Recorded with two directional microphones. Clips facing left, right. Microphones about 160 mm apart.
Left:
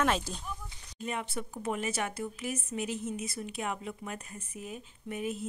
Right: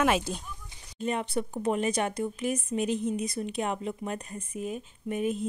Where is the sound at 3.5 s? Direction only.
30° right (ahead or behind).